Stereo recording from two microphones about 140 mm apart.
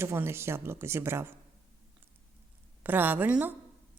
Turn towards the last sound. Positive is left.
turn(degrees=-10)  # may be behind; listen again after turning